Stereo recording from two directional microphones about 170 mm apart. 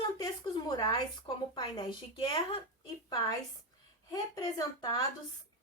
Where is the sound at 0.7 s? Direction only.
25° left (ahead or behind).